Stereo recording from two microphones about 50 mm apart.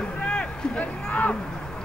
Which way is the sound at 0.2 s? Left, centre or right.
Left.